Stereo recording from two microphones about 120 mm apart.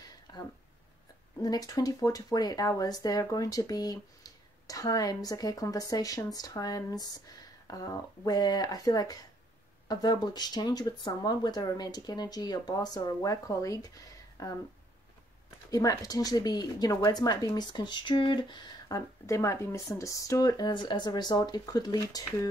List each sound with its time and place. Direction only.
1.4 s speech: 35° left (ahead or behind)
15.7 s speech: 30° left (ahead or behind)